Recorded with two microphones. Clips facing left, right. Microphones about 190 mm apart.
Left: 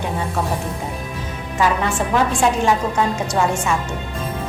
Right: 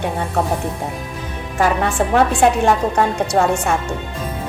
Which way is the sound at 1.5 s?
55° right (ahead or behind).